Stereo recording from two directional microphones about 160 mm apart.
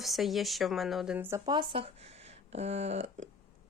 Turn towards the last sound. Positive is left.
turn(degrees=-45)  # may be behind; listen again after turning